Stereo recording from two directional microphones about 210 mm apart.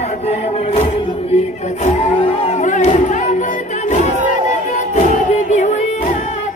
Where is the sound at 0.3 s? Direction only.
30° left (ahead or behind).